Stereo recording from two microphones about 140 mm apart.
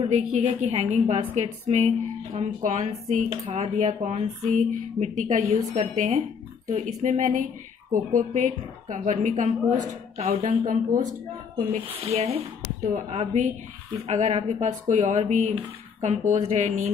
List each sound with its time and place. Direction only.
0.1 s speech: 55° right (ahead or behind)
5.4 s speech: 50° right (ahead or behind)
11.7 s speech: 50° right (ahead or behind)